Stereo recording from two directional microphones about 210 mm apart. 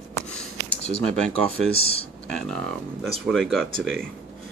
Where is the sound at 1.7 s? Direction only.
30° left (ahead or behind).